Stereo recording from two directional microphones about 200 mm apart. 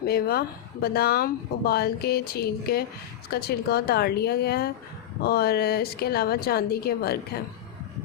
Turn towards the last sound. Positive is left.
turn(degrees=50)  # may be behind; listen again after turning